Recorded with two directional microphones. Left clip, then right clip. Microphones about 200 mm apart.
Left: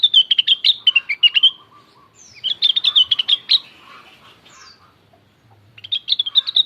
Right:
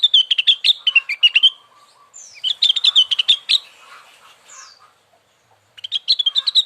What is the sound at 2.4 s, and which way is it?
Chirp, 20° right (ahead or behind).